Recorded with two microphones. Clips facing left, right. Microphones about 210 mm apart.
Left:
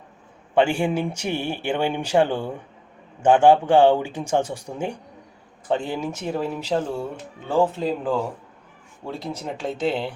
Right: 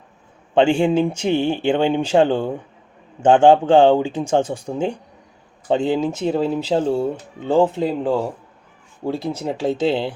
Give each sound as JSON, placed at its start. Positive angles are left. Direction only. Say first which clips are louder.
{"t": 0.5, "sound": "speech", "louder": "right 5 dB", "side_deg": -25}
{"t": 9.5, "sound": "speech", "louder": "right 5 dB", "side_deg": -30}